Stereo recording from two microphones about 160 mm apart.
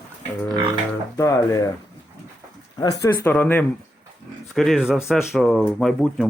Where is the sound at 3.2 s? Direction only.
10° left (ahead or behind).